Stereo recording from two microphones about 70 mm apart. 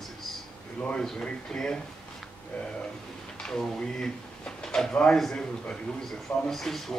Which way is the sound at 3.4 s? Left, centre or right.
Centre.